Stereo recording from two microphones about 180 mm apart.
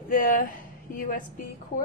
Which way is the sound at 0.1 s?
50° left (ahead or behind).